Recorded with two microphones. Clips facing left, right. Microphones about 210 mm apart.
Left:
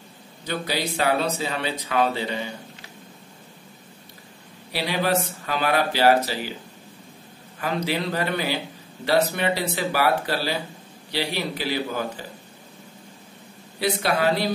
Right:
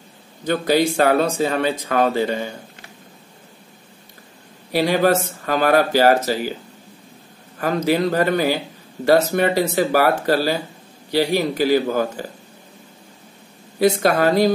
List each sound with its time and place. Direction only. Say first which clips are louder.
0.5 s speech: right 10 dB; 50° right (ahead or behind)
4.7 s speech: right 7 dB; 45° right (ahead or behind)
7.5 s speech: right 7 dB; 45° right (ahead or behind)
13.7 s speech: right 7 dB; 45° right (ahead or behind)